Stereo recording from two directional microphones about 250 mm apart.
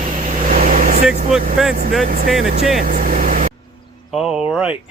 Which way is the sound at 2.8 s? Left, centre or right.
Right.